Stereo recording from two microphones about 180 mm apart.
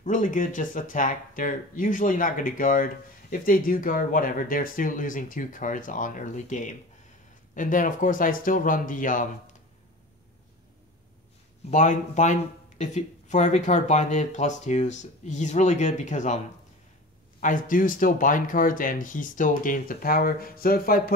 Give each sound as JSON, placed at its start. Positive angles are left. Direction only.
{"t": 0.0, "sound": "speech", "side_deg": 45}
{"t": 11.7, "sound": "speech", "side_deg": 45}
{"t": 17.4, "sound": "speech", "side_deg": 50}